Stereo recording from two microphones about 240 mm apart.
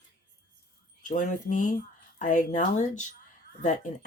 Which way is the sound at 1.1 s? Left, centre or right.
Left.